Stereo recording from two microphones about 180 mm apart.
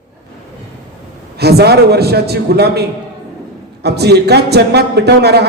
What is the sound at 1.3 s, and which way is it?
A man's voice, 65° right (ahead or behind).